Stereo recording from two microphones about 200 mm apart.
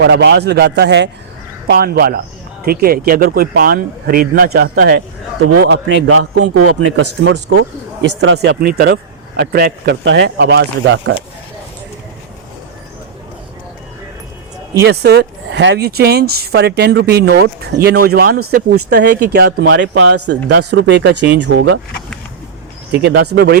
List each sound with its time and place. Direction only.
0.0 s speech: 60° right (ahead or behind)
5.6 s speech: 70° right (ahead or behind)
14.8 s speech: 55° right (ahead or behind); by 20.3 s 90° right
20.6 s speech: 60° right (ahead or behind)
22.9 s speech: 55° right (ahead or behind)